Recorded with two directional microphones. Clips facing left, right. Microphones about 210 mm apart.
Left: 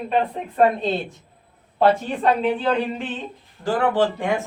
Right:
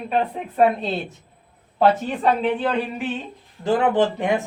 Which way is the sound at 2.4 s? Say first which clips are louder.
Left 1 dB; centre (ahead or behind).